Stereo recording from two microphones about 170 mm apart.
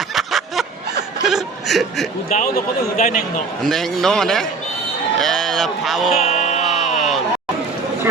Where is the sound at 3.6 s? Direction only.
Centre (ahead or behind).